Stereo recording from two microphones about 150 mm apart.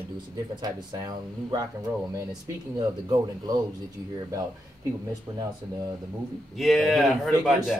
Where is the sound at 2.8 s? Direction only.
25° right (ahead or behind).